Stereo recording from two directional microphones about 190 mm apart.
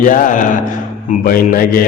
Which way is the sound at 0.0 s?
45° left (ahead or behind).